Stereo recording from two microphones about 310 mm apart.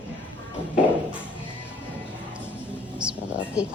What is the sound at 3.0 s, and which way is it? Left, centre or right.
Music, centre.